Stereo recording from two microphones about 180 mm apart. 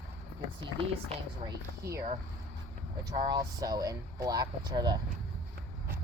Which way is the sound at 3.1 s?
20° right (ahead or behind).